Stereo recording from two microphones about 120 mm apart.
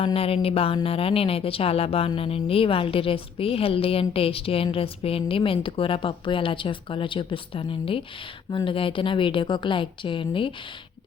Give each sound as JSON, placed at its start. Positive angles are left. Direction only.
{"t": 0.0, "sound": "speech", "side_deg": 50}